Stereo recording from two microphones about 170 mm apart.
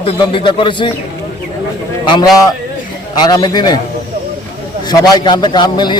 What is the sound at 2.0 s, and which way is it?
A man's voice, 25° left (ahead or behind).